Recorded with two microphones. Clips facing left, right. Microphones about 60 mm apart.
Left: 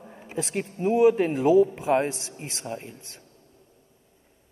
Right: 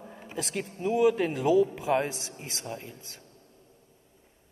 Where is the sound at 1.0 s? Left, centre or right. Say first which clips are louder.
Left 5 dB; left.